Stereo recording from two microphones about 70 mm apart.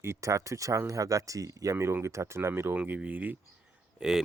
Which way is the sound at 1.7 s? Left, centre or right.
Right.